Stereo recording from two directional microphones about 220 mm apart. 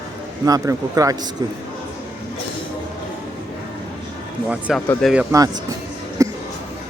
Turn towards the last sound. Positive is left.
turn(degrees=-15)  # may be behind; listen again after turning